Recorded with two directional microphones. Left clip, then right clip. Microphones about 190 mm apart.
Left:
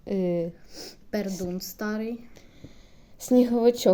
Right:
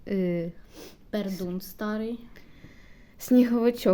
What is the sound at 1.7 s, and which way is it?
Speech, 5° right (ahead or behind).